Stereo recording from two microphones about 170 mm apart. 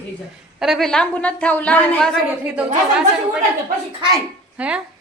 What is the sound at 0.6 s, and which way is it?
A woman's voice, centre (ahead or behind).